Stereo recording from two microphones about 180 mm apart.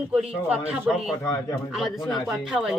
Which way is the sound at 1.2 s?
20° left (ahead or behind).